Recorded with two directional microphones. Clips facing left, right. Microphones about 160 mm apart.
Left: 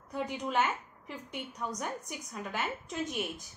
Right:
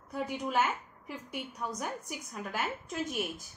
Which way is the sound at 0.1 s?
5° right (ahead or behind).